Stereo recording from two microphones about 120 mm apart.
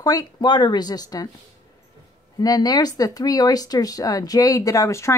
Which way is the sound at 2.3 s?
35° left (ahead or behind).